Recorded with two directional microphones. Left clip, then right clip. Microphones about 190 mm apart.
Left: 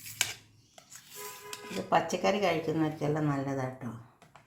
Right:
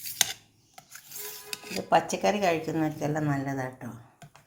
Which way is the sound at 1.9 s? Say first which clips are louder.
Right 3 dB; 35° right (ahead or behind).